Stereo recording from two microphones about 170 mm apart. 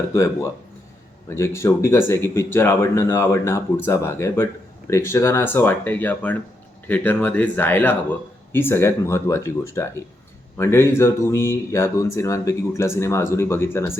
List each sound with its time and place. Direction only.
1.3 s speech: 15° left (ahead or behind)